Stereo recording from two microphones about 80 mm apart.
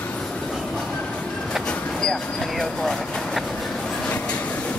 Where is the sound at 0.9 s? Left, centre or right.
Centre.